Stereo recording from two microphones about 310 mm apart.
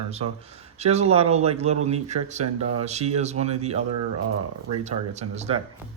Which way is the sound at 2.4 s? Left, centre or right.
Right.